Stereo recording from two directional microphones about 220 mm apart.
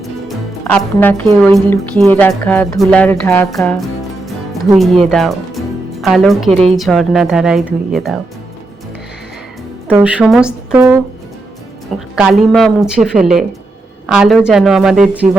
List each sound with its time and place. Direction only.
0.7 s speech: 10° left (ahead or behind)
9.9 s speech: 5° right (ahead or behind)